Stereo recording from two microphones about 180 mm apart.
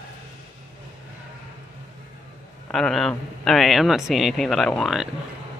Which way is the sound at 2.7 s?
Centre (ahead or behind).